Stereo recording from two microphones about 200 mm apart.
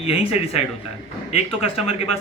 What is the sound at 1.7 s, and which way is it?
Mantra, 30° left (ahead or behind).